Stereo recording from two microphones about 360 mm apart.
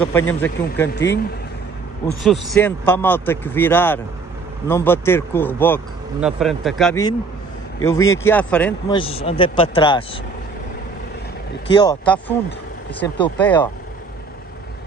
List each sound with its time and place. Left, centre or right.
0.3 s a man's voice: centre
0.9 s a man's voice: left
2.2 s a man's voice: centre
11.7 s speech: centre